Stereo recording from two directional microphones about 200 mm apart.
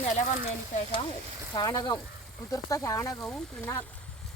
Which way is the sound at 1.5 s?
20° left (ahead or behind).